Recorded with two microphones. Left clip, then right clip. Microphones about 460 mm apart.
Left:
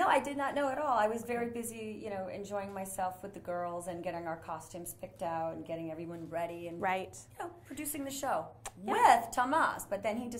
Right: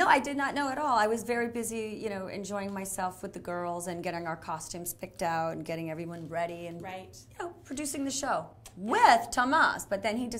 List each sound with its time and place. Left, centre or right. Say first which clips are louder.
0.0 s a woman's voice: right 4 dB; right
6.8 s a woman's voice: left 8 dB; left
7.3 s a woman's voice: right 5 dB; right